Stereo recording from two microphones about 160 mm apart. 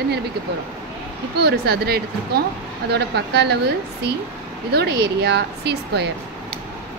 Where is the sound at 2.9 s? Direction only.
90° right.